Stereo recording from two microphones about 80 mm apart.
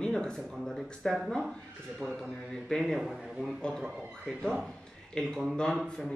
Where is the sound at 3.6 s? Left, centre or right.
Centre.